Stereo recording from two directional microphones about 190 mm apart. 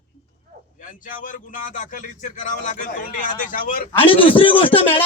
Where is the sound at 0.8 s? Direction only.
45° left (ahead or behind).